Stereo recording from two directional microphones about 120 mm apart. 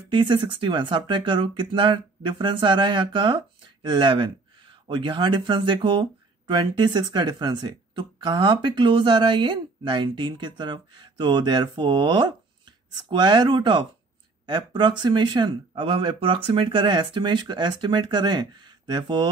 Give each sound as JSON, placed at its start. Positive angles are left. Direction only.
{"t": 0.1, "sound": "speech", "side_deg": -40}